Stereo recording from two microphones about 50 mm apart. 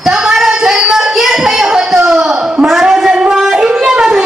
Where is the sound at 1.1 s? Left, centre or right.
Centre.